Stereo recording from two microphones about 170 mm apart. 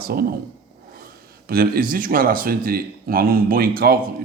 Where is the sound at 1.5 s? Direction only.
60° right (ahead or behind).